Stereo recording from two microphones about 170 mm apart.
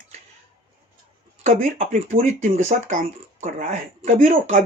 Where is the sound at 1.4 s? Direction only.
50° right (ahead or behind).